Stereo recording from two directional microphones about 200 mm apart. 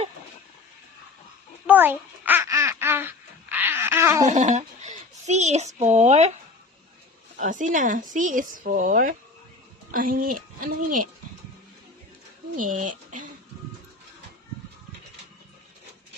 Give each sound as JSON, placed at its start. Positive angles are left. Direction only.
{"t": 1.6, "sound": "babbling", "side_deg": -10}
{"t": 4.3, "sound": "a child's voice", "side_deg": -35}
{"t": 7.3, "sound": "speech", "side_deg": -40}
{"t": 12.5, "sound": "speech", "side_deg": -40}